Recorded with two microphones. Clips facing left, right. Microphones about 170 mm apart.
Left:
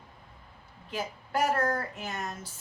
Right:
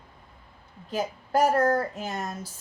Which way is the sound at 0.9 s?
40° right (ahead or behind).